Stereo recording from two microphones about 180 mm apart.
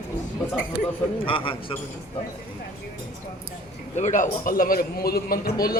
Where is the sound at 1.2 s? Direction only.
30° left (ahead or behind).